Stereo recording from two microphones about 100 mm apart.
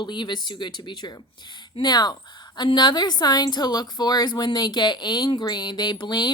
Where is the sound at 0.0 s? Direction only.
50° left (ahead or behind).